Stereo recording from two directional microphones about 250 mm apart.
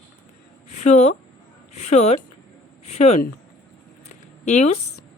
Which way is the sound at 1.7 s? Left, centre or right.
Left.